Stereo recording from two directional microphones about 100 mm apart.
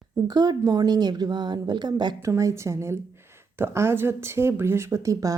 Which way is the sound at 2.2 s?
30° right (ahead or behind).